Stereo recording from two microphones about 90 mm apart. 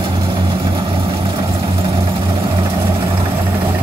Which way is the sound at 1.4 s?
40° right (ahead or behind).